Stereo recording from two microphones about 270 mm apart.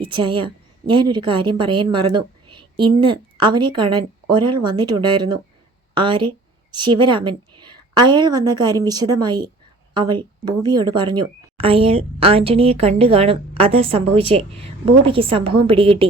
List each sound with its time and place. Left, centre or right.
0.0 s a woman's voice: centre